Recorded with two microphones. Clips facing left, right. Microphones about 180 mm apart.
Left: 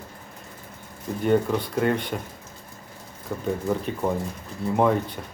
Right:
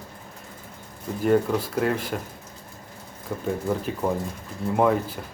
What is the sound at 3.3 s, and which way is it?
Speech, 5° right (ahead or behind).